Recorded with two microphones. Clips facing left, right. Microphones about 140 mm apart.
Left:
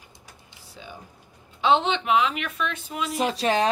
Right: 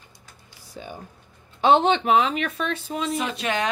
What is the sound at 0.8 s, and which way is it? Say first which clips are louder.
Speech: right 5 dB; 50° right (ahead or behind).